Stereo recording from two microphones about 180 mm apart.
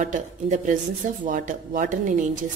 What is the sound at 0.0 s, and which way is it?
Speech, 45° right (ahead or behind).